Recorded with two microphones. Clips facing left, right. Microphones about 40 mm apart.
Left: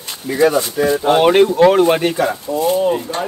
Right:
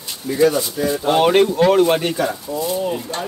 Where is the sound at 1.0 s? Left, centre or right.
Centre.